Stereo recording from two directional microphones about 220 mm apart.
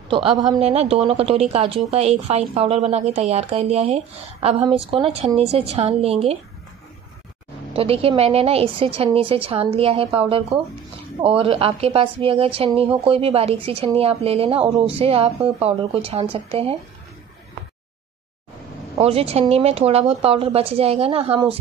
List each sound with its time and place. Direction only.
0.1 s a woman's voice: 25° right (ahead or behind)
7.7 s a woman's voice: 25° right (ahead or behind)
18.9 s a woman's voice: 25° right (ahead or behind)